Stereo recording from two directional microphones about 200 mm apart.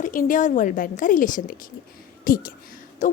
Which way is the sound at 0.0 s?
40° left (ahead or behind).